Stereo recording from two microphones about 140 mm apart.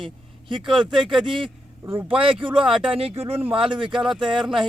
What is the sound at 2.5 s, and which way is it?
Speech, 5° right (ahead or behind).